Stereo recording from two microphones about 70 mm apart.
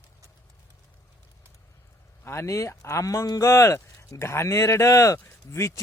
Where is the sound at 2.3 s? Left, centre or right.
Left.